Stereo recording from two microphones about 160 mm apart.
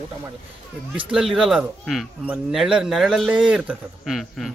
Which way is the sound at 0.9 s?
5° right (ahead or behind).